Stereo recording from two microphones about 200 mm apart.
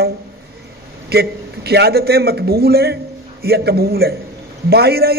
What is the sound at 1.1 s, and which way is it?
A man's voice, 50° right (ahead or behind).